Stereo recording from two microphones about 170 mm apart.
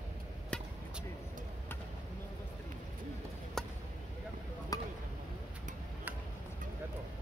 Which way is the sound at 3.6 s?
5° left (ahead or behind).